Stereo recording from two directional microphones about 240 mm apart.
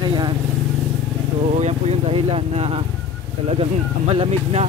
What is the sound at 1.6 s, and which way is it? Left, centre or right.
Speech, right.